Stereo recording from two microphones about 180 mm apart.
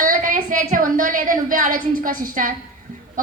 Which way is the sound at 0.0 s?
50° right (ahead or behind).